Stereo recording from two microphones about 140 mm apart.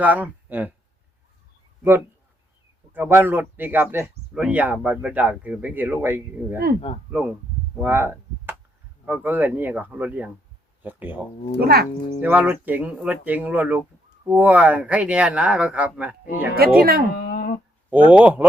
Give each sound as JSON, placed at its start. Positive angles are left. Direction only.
{"t": 0.0, "sound": "speech", "side_deg": -10}
{"t": 2.9, "sound": "speech", "side_deg": -15}
{"t": 11.6, "sound": "speech", "side_deg": -90}
{"t": 12.2, "sound": "speech", "side_deg": -10}
{"t": 16.6, "sound": "speech", "side_deg": -90}
{"t": 17.2, "sound": "a sound", "side_deg": 90}
{"t": 17.9, "sound": "speech", "side_deg": -10}